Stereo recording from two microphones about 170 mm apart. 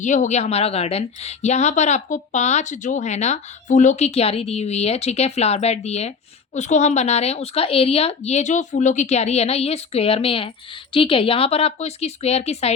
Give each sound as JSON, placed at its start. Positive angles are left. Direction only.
{"t": 0.0, "sound": "a woman's voice", "side_deg": 45}